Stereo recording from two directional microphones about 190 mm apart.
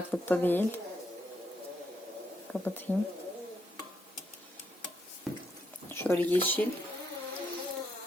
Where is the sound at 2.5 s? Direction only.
10° left (ahead or behind).